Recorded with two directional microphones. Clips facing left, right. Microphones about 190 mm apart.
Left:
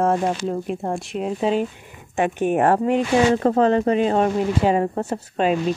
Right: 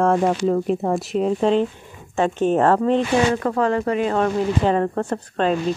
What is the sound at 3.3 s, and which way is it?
Speech, 25° left (ahead or behind).